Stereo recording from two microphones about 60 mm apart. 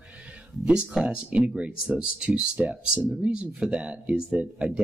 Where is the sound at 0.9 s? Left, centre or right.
Centre.